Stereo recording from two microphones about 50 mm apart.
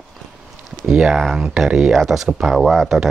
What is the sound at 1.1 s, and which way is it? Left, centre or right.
Speech, centre.